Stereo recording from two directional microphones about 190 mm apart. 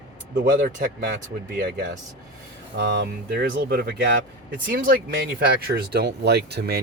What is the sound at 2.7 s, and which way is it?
Speech, 60° right (ahead or behind).